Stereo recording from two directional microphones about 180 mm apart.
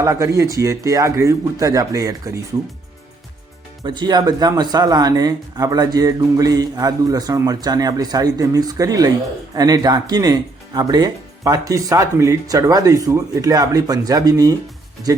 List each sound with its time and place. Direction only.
0.0 s speech: 20° right (ahead or behind)
3.8 s speech: 25° right (ahead or behind)